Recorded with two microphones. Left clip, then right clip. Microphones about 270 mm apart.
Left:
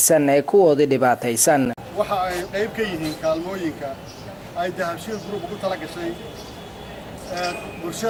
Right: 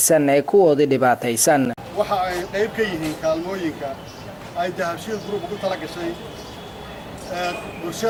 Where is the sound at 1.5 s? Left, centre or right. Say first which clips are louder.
Right 1 dB; centre.